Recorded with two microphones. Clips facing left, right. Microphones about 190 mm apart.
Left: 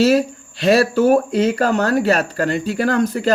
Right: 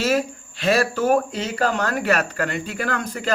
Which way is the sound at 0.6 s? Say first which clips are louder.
Left 6 dB; 35° left (ahead or behind).